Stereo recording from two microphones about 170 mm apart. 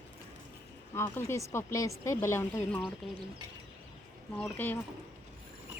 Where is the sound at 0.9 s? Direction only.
15° left (ahead or behind).